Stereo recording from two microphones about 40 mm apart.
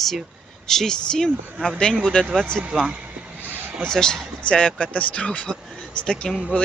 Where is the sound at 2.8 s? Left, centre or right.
Right.